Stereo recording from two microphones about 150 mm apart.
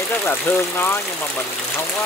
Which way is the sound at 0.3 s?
15° left (ahead or behind).